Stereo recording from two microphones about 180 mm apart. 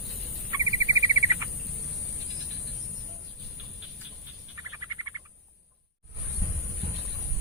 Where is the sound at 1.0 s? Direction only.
15° right (ahead or behind).